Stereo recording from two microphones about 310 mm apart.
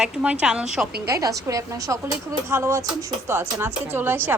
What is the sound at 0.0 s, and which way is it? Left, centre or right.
A woman's voice, centre.